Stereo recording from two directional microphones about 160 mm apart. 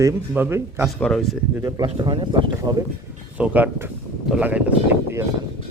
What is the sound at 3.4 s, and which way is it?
Speech, 10° right (ahead or behind).